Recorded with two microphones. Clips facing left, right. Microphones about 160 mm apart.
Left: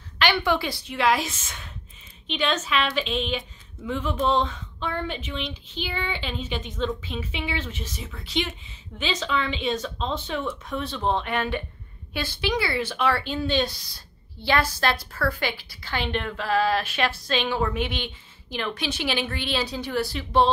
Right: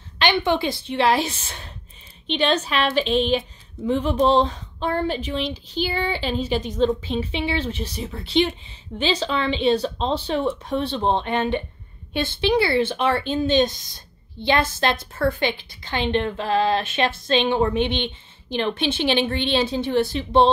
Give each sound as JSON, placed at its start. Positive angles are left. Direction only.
{"t": 0.2, "sound": "a woman's voice", "side_deg": -20}